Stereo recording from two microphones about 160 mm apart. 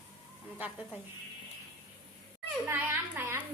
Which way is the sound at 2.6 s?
15° right (ahead or behind).